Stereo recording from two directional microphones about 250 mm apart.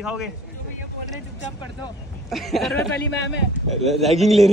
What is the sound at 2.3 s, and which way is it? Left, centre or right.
Speech, centre.